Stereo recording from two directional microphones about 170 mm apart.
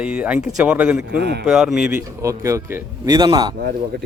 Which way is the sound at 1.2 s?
75° right (ahead or behind).